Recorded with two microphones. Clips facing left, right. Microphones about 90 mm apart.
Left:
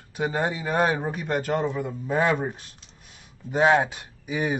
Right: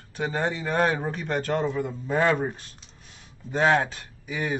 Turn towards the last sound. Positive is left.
turn(degrees=15)  # may be behind; listen again after turning